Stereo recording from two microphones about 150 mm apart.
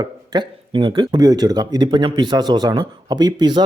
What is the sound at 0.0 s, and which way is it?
A man's voice, 30° right (ahead or behind).